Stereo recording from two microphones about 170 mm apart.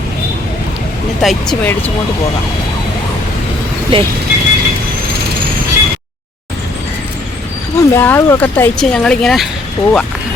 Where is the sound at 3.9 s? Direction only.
30° right (ahead or behind).